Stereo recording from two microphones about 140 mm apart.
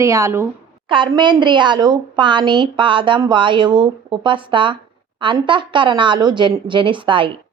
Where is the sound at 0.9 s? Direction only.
35° right (ahead or behind).